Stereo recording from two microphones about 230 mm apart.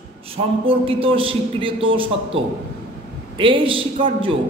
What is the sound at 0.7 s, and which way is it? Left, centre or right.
A man's voice, right.